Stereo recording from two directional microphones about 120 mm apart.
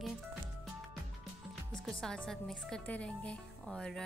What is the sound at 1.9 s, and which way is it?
A woman's voice, 5° left (ahead or behind).